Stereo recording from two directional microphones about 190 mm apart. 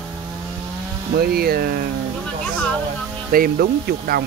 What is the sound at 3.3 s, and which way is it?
Speech, 50° right (ahead or behind).